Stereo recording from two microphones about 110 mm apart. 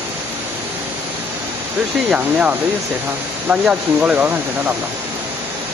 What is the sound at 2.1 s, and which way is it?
Speech, 10° right (ahead or behind).